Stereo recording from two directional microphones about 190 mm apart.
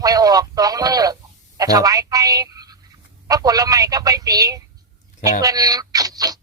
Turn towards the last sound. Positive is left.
turn(degrees=-20)  # may be behind; listen again after turning